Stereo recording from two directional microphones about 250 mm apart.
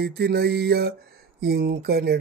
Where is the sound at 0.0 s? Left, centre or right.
Right.